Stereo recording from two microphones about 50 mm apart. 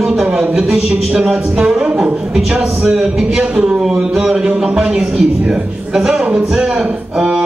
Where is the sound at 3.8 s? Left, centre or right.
Centre.